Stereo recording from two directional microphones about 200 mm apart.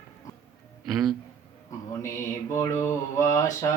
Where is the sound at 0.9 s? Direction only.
Centre (ahead or behind).